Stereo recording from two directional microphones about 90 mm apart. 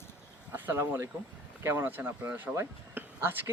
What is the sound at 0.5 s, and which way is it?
Speech, 25° right (ahead or behind).